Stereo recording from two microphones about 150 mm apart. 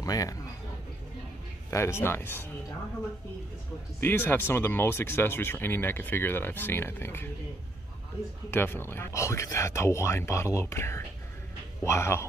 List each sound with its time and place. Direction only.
0.0 s speech: 25° left (ahead or behind)
1.7 s speech: 20° left (ahead or behind)
4.0 s speech: 15° left (ahead or behind)
8.5 s speech: 15° left (ahead or behind)